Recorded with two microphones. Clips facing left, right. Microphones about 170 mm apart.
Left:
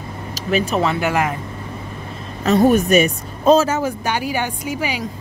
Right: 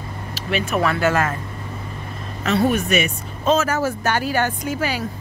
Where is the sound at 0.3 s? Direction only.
40° left (ahead or behind).